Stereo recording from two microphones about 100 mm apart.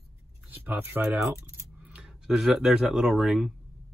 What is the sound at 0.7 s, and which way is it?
Speech, 20° right (ahead or behind).